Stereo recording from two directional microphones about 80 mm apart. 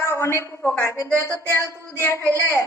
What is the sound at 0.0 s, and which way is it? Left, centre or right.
A woman's voice, left.